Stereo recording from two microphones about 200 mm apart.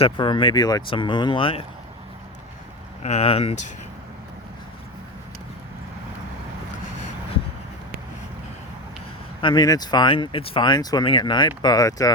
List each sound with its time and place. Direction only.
0.0 s speech: 25° left (ahead or behind)
3.0 s speech: 30° left (ahead or behind)
9.4 s speech: 20° left (ahead or behind)